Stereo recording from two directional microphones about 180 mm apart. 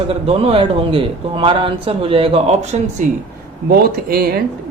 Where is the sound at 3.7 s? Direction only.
55° right (ahead or behind).